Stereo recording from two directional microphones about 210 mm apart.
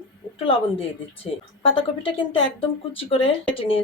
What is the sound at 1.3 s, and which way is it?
Speech, 25° left (ahead or behind).